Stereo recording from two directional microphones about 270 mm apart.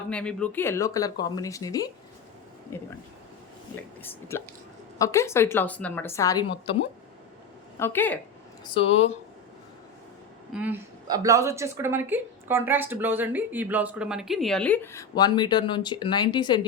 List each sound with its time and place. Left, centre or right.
0.1 s speech: centre
4.0 s speech: centre
7.8 s speech: centre
8.6 s speech: centre
10.5 s a woman's voice: centre